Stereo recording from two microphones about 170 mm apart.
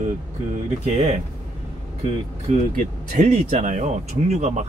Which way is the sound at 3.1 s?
45° right (ahead or behind).